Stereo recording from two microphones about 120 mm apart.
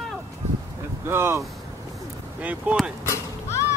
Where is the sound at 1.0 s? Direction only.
20° right (ahead or behind).